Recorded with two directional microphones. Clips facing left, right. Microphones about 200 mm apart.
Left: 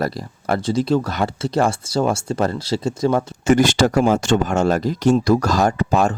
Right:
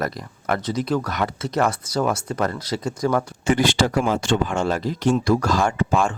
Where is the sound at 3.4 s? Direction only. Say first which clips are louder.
Left 6 dB; 45° left (ahead or behind).